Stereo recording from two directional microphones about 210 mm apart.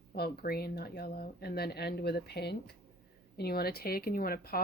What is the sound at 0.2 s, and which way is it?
Speech, 45° left (ahead or behind).